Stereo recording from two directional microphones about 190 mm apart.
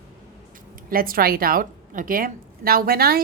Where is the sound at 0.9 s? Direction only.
50° right (ahead or behind).